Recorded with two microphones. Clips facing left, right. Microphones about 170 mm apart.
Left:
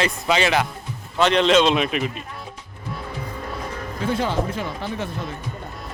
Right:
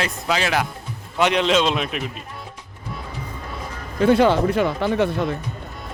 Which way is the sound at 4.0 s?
70° right (ahead or behind).